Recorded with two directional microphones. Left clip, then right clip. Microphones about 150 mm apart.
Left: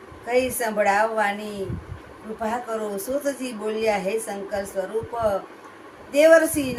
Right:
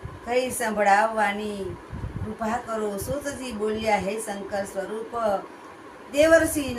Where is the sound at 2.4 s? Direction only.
15° left (ahead or behind).